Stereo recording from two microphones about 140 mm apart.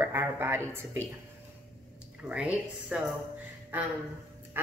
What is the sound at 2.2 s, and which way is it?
Speech, 5° right (ahead or behind).